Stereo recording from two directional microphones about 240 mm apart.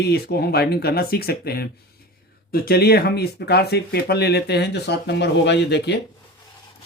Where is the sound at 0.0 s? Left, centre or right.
Left.